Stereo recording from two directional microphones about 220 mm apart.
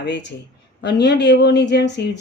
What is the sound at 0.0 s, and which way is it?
Speech, 50° left (ahead or behind).